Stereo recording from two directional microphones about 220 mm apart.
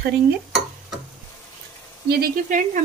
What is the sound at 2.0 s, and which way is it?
Speech, 40° right (ahead or behind).